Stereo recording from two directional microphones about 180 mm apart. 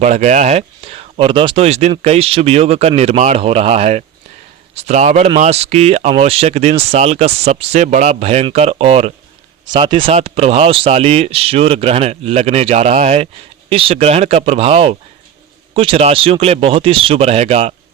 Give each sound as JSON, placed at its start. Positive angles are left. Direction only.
{"t": 0.0, "sound": "speech", "side_deg": -40}